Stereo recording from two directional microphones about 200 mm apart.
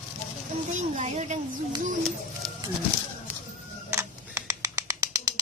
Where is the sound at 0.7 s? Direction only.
35° right (ahead or behind).